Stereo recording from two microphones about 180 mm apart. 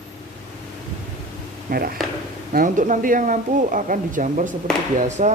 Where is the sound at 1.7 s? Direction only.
55° right (ahead or behind).